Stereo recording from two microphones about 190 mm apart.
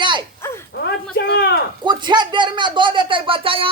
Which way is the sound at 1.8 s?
25° right (ahead or behind).